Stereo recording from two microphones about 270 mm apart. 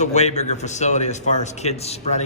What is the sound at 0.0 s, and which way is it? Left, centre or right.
A man's voice, left.